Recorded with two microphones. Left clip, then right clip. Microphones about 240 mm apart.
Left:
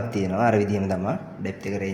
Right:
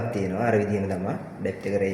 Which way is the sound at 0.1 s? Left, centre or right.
Left.